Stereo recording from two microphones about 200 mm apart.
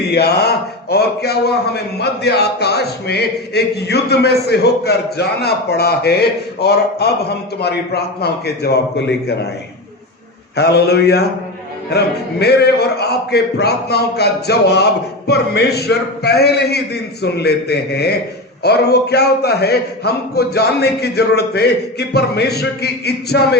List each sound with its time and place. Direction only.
0.1 s a man's voice: 55° left (ahead or behind)
10.5 s a man's voice: 55° left (ahead or behind)